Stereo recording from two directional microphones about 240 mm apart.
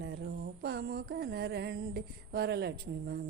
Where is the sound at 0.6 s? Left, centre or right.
Right.